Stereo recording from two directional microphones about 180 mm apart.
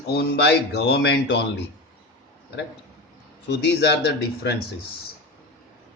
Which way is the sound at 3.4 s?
70° left (ahead or behind).